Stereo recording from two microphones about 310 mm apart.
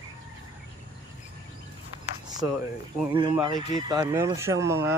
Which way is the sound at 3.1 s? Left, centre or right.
Centre.